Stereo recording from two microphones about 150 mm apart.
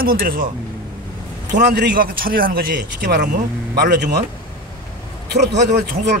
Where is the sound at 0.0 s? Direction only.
75° right (ahead or behind).